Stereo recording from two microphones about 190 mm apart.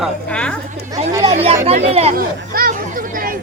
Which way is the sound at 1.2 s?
30° right (ahead or behind).